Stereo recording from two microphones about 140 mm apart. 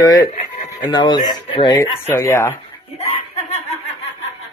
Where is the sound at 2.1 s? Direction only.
20° left (ahead or behind).